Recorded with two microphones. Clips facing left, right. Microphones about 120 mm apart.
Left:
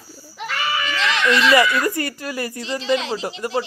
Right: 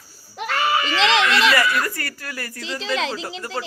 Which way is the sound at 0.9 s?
90° right.